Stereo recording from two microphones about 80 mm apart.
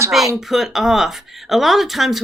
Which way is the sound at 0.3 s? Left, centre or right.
Centre.